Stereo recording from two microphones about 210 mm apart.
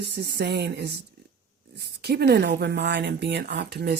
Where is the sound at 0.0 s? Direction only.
50° right (ahead or behind).